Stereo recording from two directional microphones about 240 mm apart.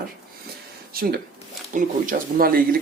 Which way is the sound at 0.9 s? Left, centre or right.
Right.